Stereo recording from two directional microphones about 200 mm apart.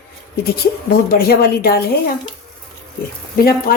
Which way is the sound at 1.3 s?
50° left (ahead or behind).